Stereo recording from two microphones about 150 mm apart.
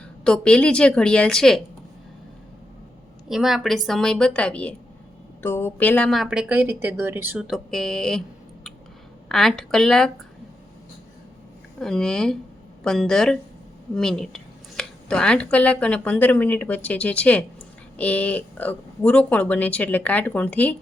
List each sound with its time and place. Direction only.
0.3 s a woman's voice: 5° left (ahead or behind)
3.2 s a woman's voice: centre (ahead or behind)
7.4 s a woman's voice: centre (ahead or behind)
9.3 s a woman's voice: centre (ahead or behind)
11.8 s a woman's voice: 5° left (ahead or behind)